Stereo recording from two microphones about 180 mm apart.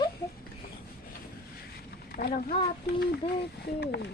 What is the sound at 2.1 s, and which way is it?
Speech, 55° left (ahead or behind).